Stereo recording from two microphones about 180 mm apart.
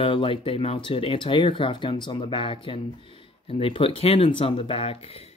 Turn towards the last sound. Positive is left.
turn(degrees=35)  # may be behind; listen again after turning